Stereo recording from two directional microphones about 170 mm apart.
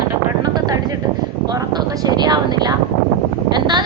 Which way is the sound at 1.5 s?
20° right (ahead or behind).